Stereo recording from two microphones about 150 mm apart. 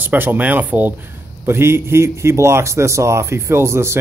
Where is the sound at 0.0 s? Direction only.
15° right (ahead or behind).